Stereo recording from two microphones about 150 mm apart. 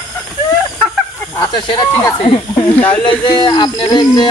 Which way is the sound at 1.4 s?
30° left (ahead or behind).